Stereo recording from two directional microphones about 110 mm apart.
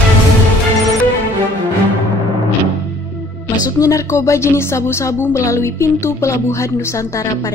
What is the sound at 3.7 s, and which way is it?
A woman's voice, 30° left (ahead or behind).